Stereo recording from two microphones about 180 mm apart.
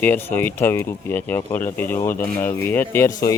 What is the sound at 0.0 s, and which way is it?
Speech, 10° left (ahead or behind).